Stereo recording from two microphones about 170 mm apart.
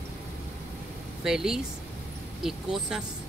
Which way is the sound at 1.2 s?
5° right (ahead or behind).